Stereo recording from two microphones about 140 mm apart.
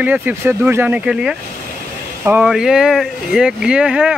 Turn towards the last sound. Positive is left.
turn(degrees=-5)  # may be behind; listen again after turning